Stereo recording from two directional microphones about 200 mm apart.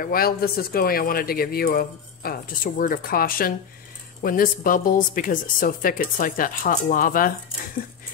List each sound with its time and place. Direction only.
0.0 s speech: 50° left (ahead or behind)